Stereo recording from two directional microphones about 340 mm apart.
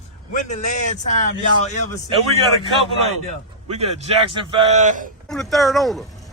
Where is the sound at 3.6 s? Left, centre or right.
Centre.